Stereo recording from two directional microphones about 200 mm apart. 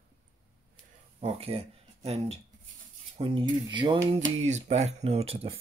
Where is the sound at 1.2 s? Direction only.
30° right (ahead or behind).